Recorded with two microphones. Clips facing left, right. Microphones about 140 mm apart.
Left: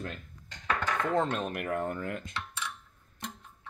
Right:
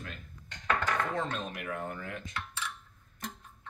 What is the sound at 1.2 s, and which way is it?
Speech, 55° left (ahead or behind).